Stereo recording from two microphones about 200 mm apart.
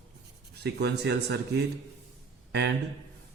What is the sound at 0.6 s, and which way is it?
Speech, 55° right (ahead or behind).